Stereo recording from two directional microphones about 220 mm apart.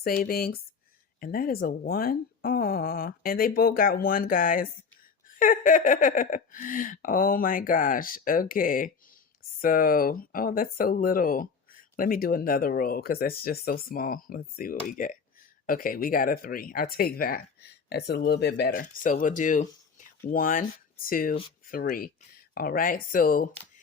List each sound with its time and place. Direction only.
0.0 s speech: 45° left (ahead or behind)